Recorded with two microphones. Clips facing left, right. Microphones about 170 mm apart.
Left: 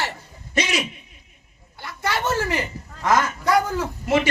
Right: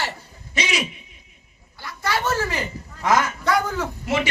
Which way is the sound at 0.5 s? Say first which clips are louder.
Left 3 dB; 55° left (ahead or behind).